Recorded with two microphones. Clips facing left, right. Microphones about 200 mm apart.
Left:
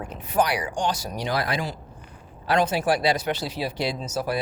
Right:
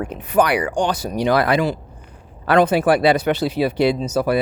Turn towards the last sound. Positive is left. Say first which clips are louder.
# right 9 dB
turn(degrees=-60)  # may be behind; listen again after turning